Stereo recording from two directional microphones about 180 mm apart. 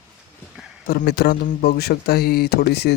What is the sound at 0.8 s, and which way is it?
Speech, 60° left (ahead or behind).